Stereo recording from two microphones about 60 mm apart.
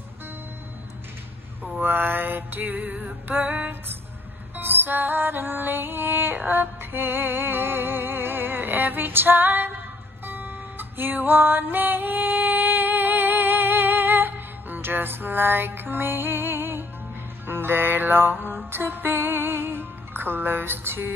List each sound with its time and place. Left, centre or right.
1.8 s music: right